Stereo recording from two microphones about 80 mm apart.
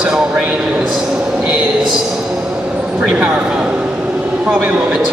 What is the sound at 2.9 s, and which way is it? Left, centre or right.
A man's voice, centre.